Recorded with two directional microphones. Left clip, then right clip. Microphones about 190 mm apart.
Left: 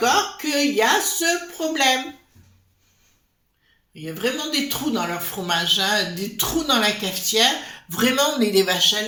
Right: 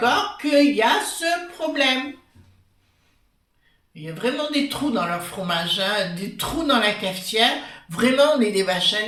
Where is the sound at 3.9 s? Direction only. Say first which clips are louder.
Even; 50° left (ahead or behind).